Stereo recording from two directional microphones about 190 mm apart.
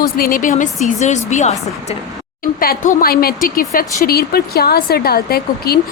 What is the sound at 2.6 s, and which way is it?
A woman's voice, 45° left (ahead or behind).